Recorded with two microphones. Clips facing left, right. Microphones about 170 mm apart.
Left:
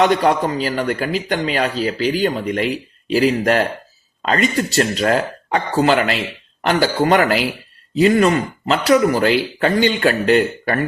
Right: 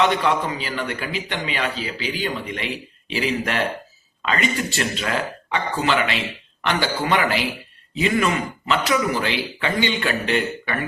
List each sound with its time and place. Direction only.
0.0 s a man's voice: 45° left (ahead or behind)